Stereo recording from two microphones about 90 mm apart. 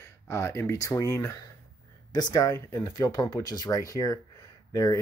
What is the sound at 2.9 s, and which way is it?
Speech, 55° left (ahead or behind).